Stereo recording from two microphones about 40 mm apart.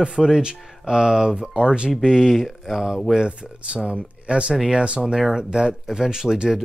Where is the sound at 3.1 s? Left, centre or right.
Right.